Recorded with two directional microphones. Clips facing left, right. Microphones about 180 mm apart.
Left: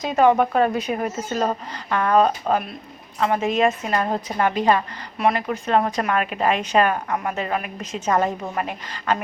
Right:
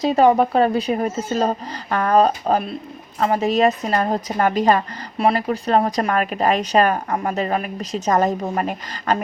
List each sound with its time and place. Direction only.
0.0 s speech: 35° right (ahead or behind)